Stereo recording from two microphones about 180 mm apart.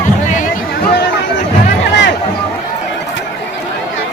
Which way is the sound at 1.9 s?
75° left (ahead or behind).